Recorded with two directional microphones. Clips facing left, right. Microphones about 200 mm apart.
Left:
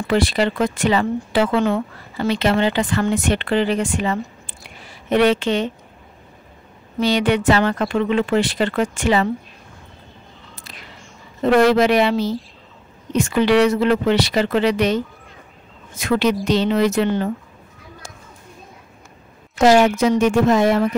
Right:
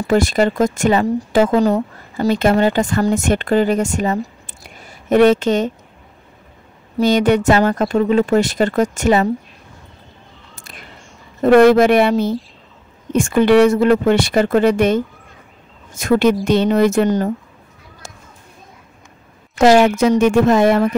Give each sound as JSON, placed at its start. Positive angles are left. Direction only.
{"t": 0.0, "sound": "speech", "side_deg": -45}
{"t": 7.0, "sound": "speech", "side_deg": -45}
{"t": 10.5, "sound": "a sound", "side_deg": -50}
{"t": 11.4, "sound": "speech", "side_deg": -50}
{"t": 19.6, "sound": "speech", "side_deg": -60}